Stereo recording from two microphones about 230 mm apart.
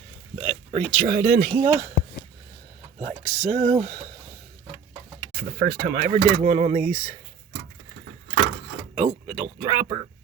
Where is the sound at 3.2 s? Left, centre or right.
Right.